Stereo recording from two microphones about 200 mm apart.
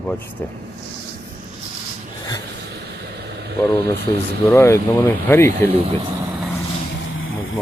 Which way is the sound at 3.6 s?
15° left (ahead or behind).